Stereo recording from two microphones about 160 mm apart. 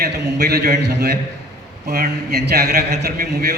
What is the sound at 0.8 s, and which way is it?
Speech, 90° right.